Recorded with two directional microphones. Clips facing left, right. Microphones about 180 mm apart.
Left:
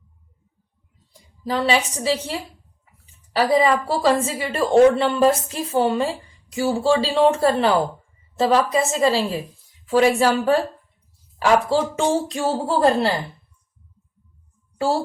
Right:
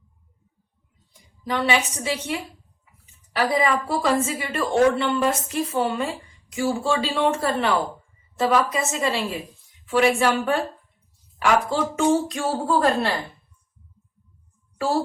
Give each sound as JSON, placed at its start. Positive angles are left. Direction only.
{"t": 1.5, "sound": "a woman's voice", "side_deg": 35}